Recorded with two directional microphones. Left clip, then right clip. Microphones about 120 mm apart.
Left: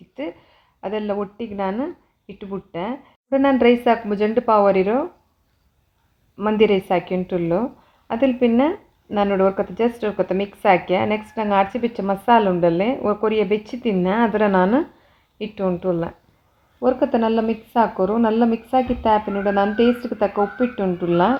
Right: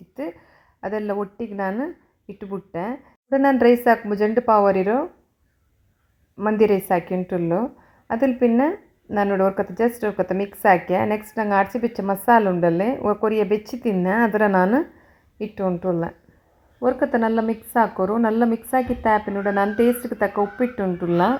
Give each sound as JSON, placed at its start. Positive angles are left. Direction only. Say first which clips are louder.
{"t": 0.9, "sound": "a woman's voice", "louder": "left 1 dB", "side_deg": -25}
{"t": 6.3, "sound": "a woman's voice", "louder": "left 1 dB", "side_deg": -15}